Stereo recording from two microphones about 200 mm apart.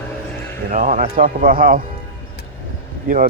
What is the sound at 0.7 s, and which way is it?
Speech, 40° right (ahead or behind).